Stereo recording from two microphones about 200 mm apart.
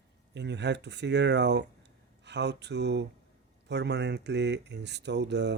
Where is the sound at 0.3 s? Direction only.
60° right (ahead or behind).